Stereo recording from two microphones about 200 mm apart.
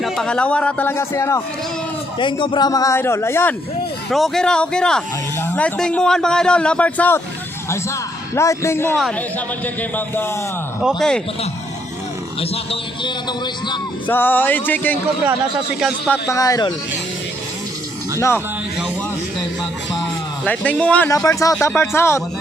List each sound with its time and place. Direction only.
0.0 s a man's voice: 5° left (ahead or behind)
2.1 s a man's voice: 25° left (ahead or behind)
4.1 s speech: centre (ahead or behind)
8.4 s a man's voice: 15° left (ahead or behind)
10.8 s speech: centre (ahead or behind)
12.4 s a man's voice: 25° left (ahead or behind)
14.1 s a man's voice: 10° left (ahead or behind)
15.8 s speech: centre (ahead or behind)
16.3 s a man's voice: 15° left (ahead or behind)
18.2 s a man's voice: 10° left (ahead or behind)
20.4 s a man's voice: 5° left (ahead or behind)